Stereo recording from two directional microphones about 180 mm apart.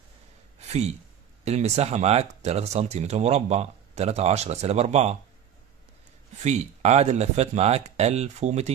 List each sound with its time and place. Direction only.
1.4 s speech: 35° right (ahead or behind)
6.4 s speech: 40° right (ahead or behind)